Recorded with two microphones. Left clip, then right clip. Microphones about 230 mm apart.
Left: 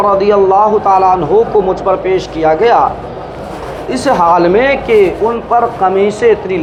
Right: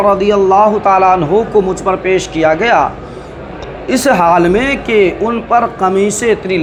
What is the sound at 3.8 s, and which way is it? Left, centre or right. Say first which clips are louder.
Speech: even; right.